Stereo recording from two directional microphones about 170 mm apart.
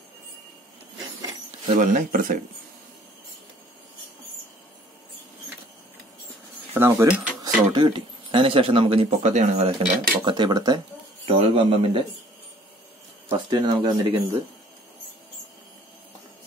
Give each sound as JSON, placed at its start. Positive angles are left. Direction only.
{"t": 1.7, "sound": "speech", "side_deg": -50}
{"t": 6.7, "sound": "speech", "side_deg": -15}
{"t": 7.4, "sound": "speech", "side_deg": -25}
{"t": 9.2, "sound": "speech", "side_deg": -40}
{"t": 11.2, "sound": "a man's voice", "side_deg": -35}
{"t": 13.5, "sound": "speech", "side_deg": -25}